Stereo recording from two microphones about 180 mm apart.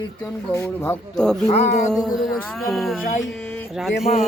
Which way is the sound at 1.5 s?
40° left (ahead or behind).